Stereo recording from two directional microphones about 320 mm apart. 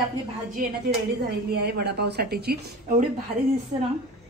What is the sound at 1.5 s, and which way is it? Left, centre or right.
Speech, right.